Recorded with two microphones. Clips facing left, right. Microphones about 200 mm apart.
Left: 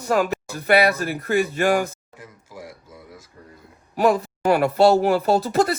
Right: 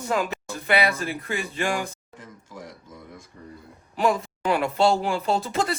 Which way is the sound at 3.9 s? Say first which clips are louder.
Left 4 dB; 55° left (ahead or behind).